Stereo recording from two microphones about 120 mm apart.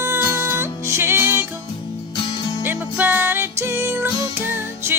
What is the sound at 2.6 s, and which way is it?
Music, 15° right (ahead or behind).